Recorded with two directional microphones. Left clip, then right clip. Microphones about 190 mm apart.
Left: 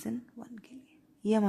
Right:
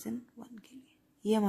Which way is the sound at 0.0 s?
15° left (ahead or behind).